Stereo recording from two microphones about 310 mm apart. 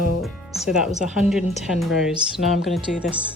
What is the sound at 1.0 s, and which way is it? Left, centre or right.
Speech, centre.